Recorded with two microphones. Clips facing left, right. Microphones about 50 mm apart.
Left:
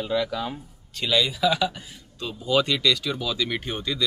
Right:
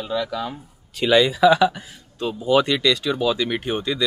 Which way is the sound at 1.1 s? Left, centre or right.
Right.